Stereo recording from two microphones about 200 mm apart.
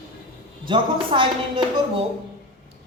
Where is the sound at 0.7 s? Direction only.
25° right (ahead or behind).